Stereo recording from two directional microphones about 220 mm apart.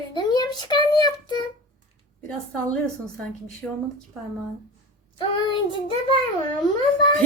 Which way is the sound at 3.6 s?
Centre (ahead or behind).